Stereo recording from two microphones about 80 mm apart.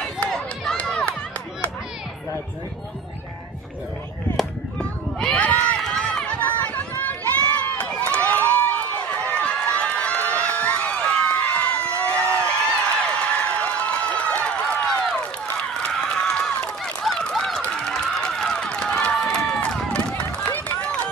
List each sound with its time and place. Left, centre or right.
0.7 s run: centre
4.7 s run: centre
5.8 s run: centre
12.8 s a sound: centre
15.4 s run: centre